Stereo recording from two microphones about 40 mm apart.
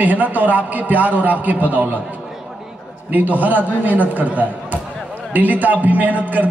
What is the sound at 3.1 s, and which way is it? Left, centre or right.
A man's voice, right.